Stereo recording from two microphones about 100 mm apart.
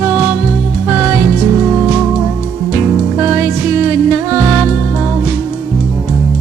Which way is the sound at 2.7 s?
25° right (ahead or behind).